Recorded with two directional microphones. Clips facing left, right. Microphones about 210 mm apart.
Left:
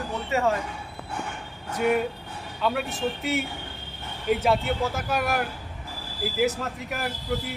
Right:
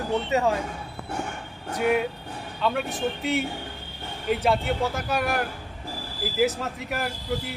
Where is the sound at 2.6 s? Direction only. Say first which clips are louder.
Even; 5° left (ahead or behind).